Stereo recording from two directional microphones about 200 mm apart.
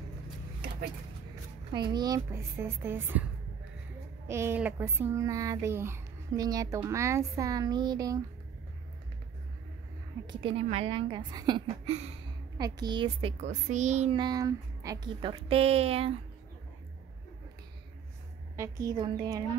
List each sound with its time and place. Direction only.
1.7 s speech: 20° right (ahead or behind)
4.3 s speech: 10° right (ahead or behind)
10.2 s a woman's voice: 25° right (ahead or behind)
12.5 s a woman's voice: 20° right (ahead or behind)
14.2 s a woman's voice: 15° right (ahead or behind)
18.6 s a woman's voice: 15° right (ahead or behind)